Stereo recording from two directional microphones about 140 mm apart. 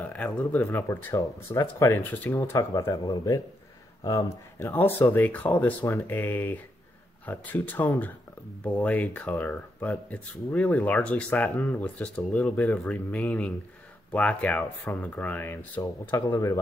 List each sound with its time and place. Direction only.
0.0 s speech: 10° left (ahead or behind)